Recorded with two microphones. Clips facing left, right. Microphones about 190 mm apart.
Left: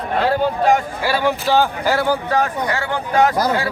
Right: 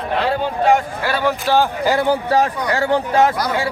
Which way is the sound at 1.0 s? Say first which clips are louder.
Left 1 dB; 5° left (ahead or behind).